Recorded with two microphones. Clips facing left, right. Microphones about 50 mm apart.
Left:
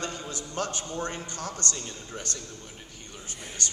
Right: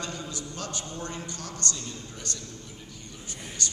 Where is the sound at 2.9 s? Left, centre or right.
Left.